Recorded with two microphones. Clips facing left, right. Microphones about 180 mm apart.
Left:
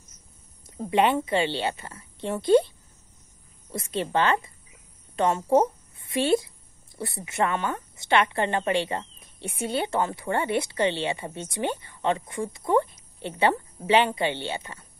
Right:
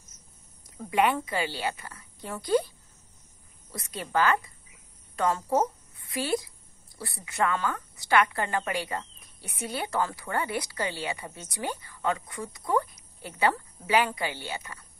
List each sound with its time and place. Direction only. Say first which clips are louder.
0.7 s a woman's voice: left 3 dB; 25° left (ahead or behind)
3.7 s a woman's voice: left 3 dB; 25° left (ahead or behind)